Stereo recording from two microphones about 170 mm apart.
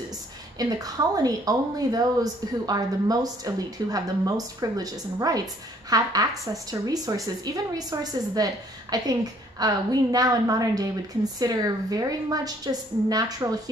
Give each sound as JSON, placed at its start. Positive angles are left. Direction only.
{"t": 0.6, "sound": "a woman's voice", "side_deg": -20}